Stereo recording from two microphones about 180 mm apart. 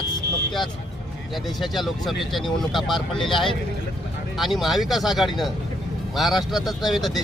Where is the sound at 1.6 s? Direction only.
Centre (ahead or behind).